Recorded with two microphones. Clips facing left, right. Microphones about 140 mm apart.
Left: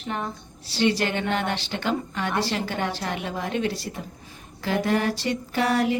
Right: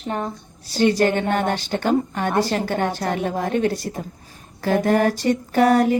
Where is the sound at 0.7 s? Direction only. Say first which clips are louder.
Right 6 dB; 45° right (ahead or behind).